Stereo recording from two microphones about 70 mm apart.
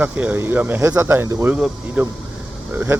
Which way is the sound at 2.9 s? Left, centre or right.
Right.